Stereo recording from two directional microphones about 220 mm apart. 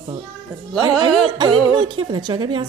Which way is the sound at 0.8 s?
20° right (ahead or behind).